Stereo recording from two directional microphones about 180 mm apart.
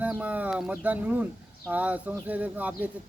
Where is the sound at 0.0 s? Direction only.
10° right (ahead or behind).